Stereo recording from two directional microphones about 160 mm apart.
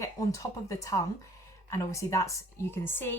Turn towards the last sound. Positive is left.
turn(degrees=15)  # may be behind; listen again after turning